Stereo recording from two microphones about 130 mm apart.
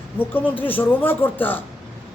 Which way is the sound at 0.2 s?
15° left (ahead or behind).